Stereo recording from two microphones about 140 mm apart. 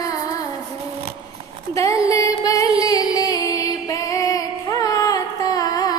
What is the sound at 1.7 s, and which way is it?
Music, 25° left (ahead or behind).